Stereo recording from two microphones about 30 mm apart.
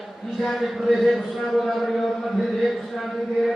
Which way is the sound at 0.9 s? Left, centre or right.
Centre.